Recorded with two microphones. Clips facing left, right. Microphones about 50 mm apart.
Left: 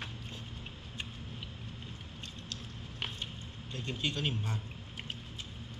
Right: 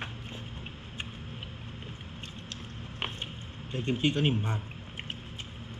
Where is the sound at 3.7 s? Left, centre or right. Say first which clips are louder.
Right 8 dB; right.